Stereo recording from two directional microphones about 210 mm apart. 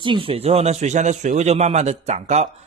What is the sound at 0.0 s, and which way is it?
Speech, 25° right (ahead or behind).